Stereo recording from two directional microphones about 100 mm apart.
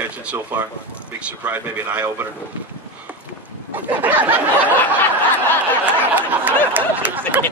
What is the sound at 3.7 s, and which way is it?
A man's voice, 15° right (ahead or behind).